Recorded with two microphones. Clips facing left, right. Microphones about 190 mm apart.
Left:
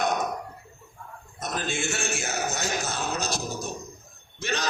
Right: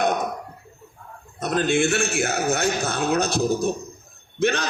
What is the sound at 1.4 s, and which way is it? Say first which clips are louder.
A man's voice: right 10 dB; 65° right (ahead or behind).